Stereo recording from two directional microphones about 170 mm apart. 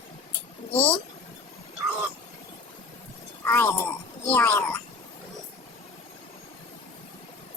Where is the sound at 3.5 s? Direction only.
15° left (ahead or behind).